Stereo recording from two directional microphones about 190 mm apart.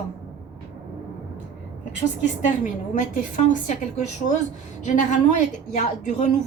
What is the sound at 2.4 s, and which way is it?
A woman's voice, 40° left (ahead or behind).